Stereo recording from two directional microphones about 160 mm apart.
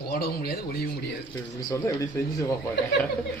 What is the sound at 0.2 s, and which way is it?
Speech, 75° left (ahead or behind).